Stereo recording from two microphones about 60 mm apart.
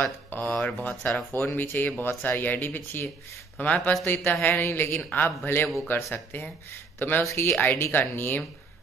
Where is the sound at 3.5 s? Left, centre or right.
Left.